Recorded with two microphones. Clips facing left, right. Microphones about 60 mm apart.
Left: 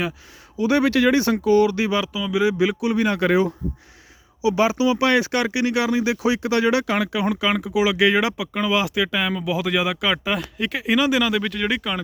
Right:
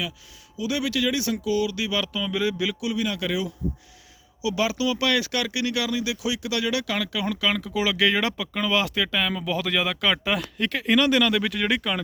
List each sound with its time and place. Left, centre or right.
0.5 s speech: left
2.0 s speech: centre; by 2.9 s left
2.9 s speech: left
4.4 s speech: left; by 11.9 s centre